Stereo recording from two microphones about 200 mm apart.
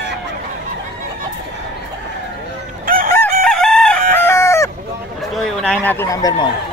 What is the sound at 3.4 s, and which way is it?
Chicken, 5° left (ahead or behind).